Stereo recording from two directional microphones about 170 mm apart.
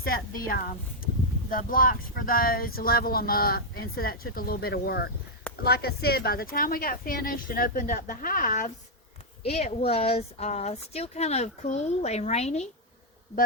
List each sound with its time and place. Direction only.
0.0 s speech: 60° left (ahead or behind)
9.4 s speech: 35° left (ahead or behind)